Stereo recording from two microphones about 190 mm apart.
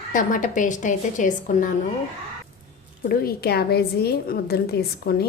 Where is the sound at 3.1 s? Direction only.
55° left (ahead or behind).